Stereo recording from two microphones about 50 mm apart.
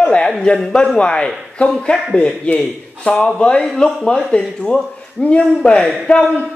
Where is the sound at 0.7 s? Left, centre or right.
Centre.